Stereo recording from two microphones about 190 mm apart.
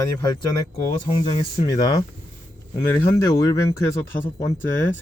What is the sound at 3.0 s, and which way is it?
Speech, 15° left (ahead or behind).